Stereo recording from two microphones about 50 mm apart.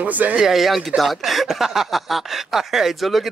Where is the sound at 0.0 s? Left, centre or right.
Right.